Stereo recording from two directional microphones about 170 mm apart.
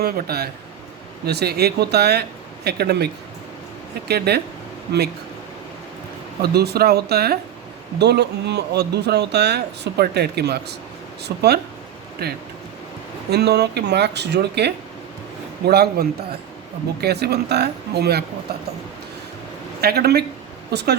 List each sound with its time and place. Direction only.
0.0 s a man's voice: 65° right (ahead or behind)
4.3 s a man's voice: 70° right (ahead or behind)
6.4 s a man's voice: 70° right (ahead or behind)
19.8 s a man's voice: 70° right (ahead or behind)